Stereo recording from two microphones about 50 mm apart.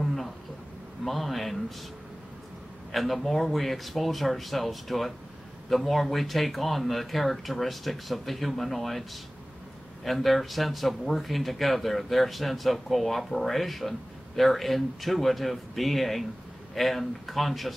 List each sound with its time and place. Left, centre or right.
0.0 s a sound: centre
1.0 s a man's voice: centre
2.9 s speech: centre
10.0 s speech: centre